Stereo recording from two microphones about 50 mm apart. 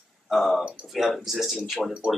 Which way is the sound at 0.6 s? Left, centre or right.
Right.